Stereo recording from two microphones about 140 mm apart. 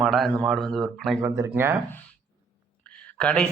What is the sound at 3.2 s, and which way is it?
Speech, 10° left (ahead or behind).